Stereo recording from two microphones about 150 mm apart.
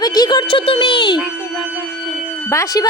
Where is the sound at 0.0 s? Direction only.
25° left (ahead or behind).